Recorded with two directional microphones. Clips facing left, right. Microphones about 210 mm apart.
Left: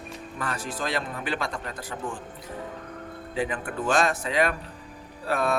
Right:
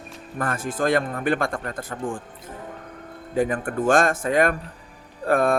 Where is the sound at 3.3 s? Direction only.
45° right (ahead or behind).